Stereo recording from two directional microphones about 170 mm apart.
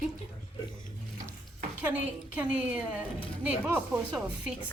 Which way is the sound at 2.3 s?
10° right (ahead or behind).